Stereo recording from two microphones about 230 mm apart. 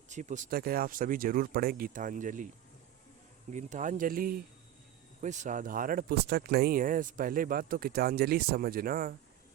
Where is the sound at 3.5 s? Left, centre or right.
Right.